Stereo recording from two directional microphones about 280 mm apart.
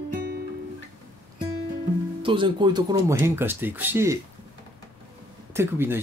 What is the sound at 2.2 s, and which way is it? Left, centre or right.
Speech, centre.